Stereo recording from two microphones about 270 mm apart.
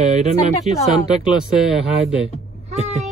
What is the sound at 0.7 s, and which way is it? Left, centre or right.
Speech, centre.